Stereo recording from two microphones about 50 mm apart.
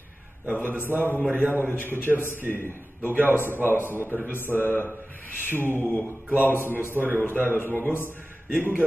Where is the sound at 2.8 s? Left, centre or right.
Right.